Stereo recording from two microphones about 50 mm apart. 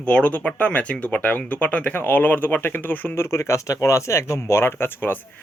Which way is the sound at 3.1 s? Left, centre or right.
Left.